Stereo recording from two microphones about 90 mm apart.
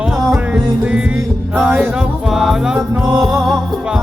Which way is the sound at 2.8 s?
20° right (ahead or behind).